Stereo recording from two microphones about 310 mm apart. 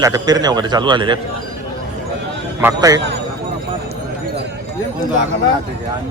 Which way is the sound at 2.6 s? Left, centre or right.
Centre.